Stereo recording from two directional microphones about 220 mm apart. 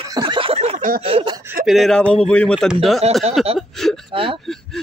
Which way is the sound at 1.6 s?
Centre (ahead or behind).